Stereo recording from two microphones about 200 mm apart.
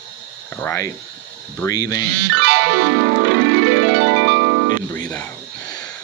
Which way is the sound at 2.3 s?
65° right (ahead or behind).